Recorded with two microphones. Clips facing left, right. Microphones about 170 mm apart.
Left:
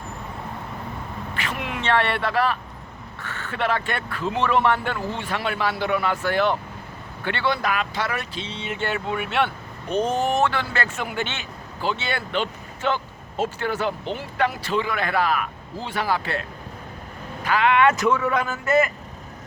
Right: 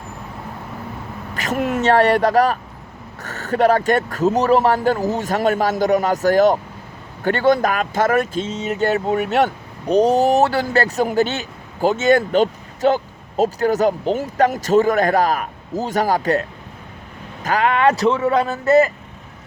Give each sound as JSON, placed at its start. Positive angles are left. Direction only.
{"t": 1.3, "sound": "speech", "side_deg": -40}